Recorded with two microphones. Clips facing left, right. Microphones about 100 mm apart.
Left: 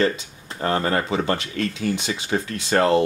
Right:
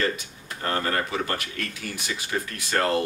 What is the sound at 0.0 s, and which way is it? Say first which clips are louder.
Speech: left 6 dB; 25° left (ahead or behind).